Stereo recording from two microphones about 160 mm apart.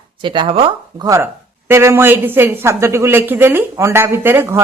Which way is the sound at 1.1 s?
15° right (ahead or behind).